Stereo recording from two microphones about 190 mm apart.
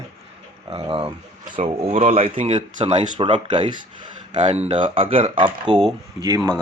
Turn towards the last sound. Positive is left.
turn(degrees=-20)  # may be behind; listen again after turning